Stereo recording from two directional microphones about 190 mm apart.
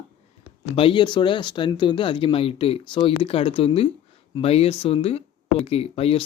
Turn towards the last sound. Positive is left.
turn(degrees=30)  # may be behind; listen again after turning